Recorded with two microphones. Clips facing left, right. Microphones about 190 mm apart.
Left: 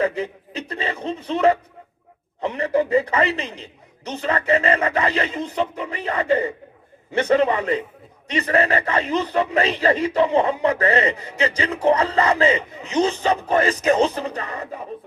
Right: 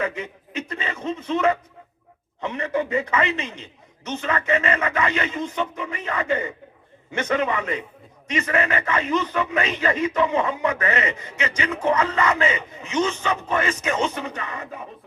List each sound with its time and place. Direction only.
0.0 s a man's voice: 35° left (ahead or behind)